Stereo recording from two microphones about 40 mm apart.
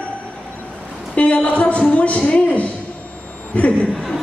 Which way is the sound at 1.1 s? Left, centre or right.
Left.